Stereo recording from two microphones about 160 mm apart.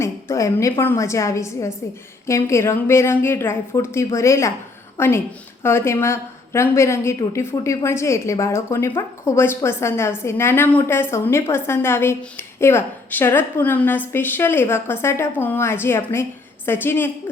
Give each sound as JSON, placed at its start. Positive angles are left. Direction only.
{"t": 0.0, "sound": "a woman's voice", "side_deg": 20}